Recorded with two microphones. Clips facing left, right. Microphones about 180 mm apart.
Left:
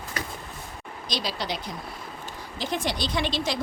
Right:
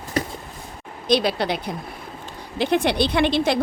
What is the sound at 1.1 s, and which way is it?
Speech, 60° right (ahead or behind).